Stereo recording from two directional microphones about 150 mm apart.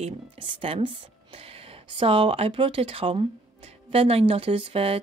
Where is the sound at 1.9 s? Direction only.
35° right (ahead or behind).